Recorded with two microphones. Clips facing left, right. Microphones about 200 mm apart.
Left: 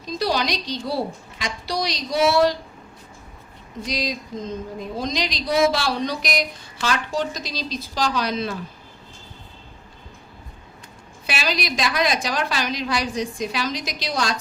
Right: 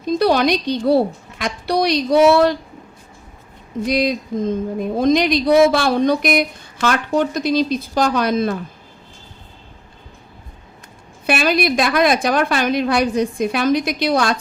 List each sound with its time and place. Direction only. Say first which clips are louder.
0.0 s speech: right 8 dB; 55° right (ahead or behind)
3.8 s speech: right 9 dB; 55° right (ahead or behind)
11.3 s speech: right 9 dB; 55° right (ahead or behind)